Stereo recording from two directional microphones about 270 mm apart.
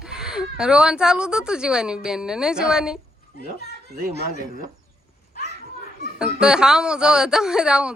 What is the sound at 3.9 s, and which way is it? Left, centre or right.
Speech, right.